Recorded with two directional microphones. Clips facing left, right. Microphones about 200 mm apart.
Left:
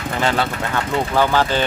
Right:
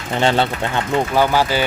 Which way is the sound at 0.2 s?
25° right (ahead or behind).